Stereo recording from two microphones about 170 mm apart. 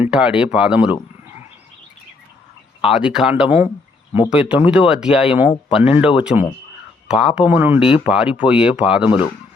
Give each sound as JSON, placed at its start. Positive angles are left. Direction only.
{"t": 0.0, "sound": "speech", "side_deg": -5}
{"t": 2.8, "sound": "speech", "side_deg": -5}
{"t": 9.0, "sound": "speech", "side_deg": 35}